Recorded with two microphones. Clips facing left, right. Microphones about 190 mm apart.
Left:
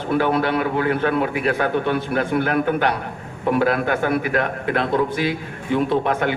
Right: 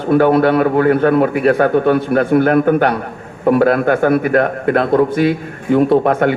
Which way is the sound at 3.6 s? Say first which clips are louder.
Right 6 dB; 55° right (ahead or behind).